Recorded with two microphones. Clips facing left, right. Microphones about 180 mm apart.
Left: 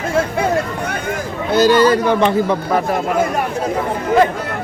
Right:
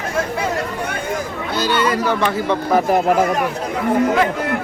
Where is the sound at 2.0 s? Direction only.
20° left (ahead or behind).